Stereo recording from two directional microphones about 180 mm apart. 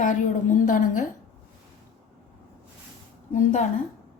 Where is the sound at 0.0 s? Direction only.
45° left (ahead or behind).